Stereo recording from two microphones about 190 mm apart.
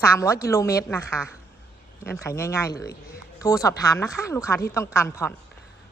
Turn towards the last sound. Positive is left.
turn(degrees=15)  # may be behind; listen again after turning